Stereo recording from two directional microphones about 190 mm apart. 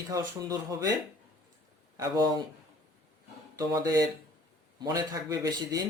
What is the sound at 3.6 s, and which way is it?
Speech, 20° right (ahead or behind).